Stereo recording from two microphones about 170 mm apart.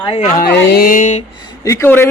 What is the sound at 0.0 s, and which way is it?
Speech, 30° left (ahead or behind).